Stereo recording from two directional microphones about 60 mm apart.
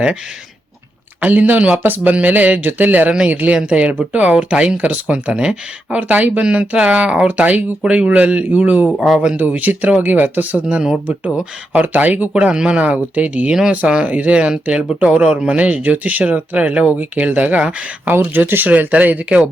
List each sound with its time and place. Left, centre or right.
1.2 s speech: right
3.1 s speech: centre
9.0 s speech: centre
9.5 s speech: right
12.3 s speech: centre
18.1 s speech: right